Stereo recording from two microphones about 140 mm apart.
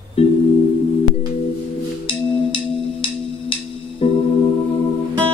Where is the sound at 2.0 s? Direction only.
40° left (ahead or behind).